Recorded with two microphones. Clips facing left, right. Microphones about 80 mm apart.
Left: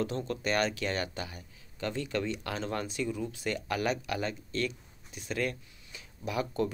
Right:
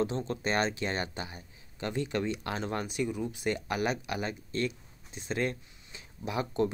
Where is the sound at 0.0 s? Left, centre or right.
Right.